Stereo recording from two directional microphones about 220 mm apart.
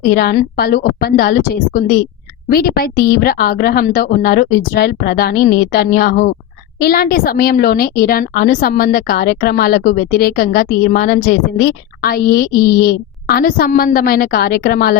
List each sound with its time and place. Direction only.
0.1 s a woman's voice: 45° left (ahead or behind)